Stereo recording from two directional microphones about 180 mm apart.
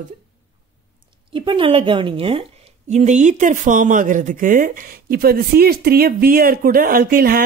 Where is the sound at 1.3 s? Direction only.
30° right (ahead or behind).